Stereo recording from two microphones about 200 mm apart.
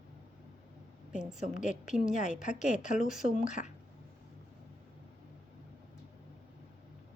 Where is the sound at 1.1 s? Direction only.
5° right (ahead or behind).